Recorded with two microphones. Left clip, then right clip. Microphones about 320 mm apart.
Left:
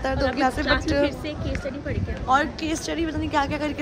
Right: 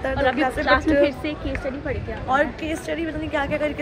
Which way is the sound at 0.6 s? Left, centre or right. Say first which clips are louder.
Right 4 dB; centre.